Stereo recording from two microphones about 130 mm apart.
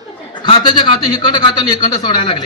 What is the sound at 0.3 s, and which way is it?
A man's voice, 35° left (ahead or behind).